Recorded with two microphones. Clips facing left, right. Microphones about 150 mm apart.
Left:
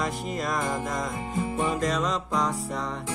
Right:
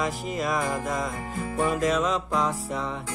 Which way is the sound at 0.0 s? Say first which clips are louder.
Right 1 dB; centre (ahead or behind).